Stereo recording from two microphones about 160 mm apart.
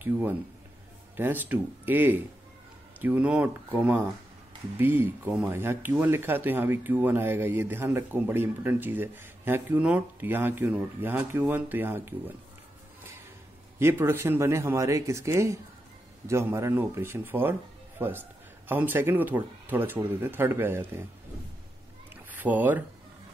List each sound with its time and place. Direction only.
0.0 s speech: 10° right (ahead or behind)
13.7 s speech: 15° right (ahead or behind)
22.3 s speech: 10° right (ahead or behind)